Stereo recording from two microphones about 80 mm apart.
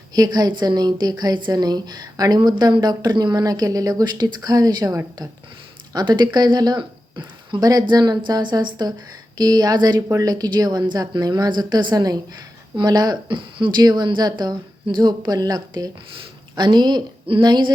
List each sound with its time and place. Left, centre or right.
0.1 s a woman's voice: right
7.6 s a woman's voice: right
16.6 s a woman's voice: right